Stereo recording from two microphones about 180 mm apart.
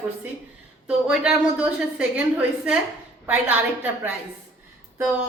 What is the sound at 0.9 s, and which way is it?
A woman's voice, 5° right (ahead or behind).